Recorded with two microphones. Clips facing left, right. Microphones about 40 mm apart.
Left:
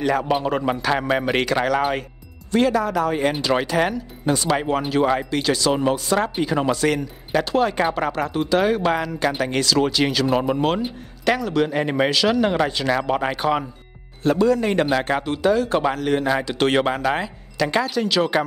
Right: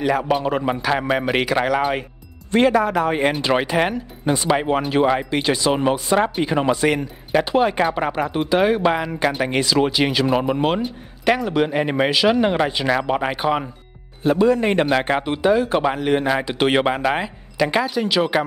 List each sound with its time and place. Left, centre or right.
0.0 s a man's voice: centre
2.5 s a man's voice: right; by 14.5 s centre
14.5 s a man's voice: right